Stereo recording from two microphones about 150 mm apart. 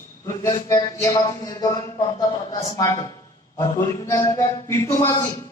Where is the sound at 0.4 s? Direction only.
20° left (ahead or behind).